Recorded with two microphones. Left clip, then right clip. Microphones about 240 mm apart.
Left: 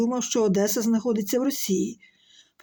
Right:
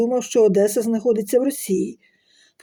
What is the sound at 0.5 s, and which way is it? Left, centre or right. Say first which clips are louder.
Speech: right 6 dB; centre.